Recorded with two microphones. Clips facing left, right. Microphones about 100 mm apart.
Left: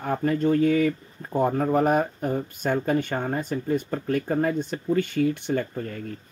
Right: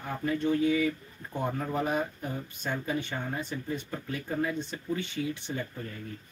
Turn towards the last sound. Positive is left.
turn(degrees=60)  # may be behind; listen again after turning